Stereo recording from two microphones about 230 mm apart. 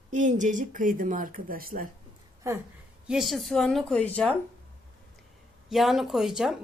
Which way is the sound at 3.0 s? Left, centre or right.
Centre.